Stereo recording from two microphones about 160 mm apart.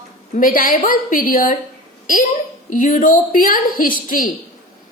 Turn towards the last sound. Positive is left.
turn(degrees=60)  # may be behind; listen again after turning